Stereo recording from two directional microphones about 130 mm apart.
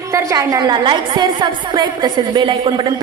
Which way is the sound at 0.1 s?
25° right (ahead or behind).